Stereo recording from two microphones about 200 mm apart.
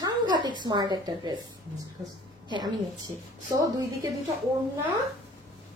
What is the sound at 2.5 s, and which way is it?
A woman's voice, 20° right (ahead or behind).